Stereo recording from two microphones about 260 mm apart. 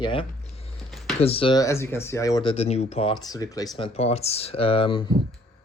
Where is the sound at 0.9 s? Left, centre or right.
Centre.